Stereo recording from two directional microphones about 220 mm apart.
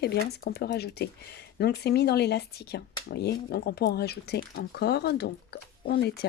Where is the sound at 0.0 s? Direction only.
45° left (ahead or behind).